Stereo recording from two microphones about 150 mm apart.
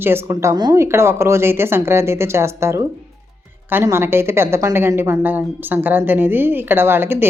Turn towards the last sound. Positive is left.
turn(degrees=-15)  # may be behind; listen again after turning